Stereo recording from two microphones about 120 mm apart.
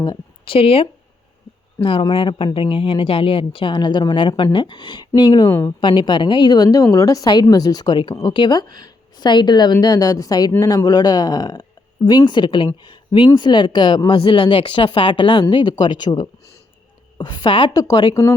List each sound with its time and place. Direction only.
0.0 s a sound: 35° left (ahead or behind)
0.5 s a woman's voice: 50° left (ahead or behind); by 5.5 s 35° left (ahead or behind)
5.5 s speech: 20° left (ahead or behind)
5.8 s a woman's voice: 40° left (ahead or behind)